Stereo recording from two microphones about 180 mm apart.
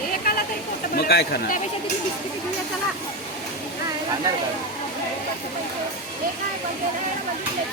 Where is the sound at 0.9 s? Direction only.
60° left (ahead or behind).